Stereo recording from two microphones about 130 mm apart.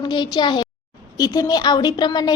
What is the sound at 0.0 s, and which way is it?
A woman's voice, 35° left (ahead or behind).